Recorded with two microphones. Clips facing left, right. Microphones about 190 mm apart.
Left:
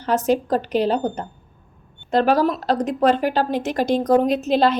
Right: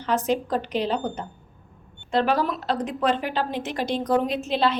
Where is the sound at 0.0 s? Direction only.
40° left (ahead or behind).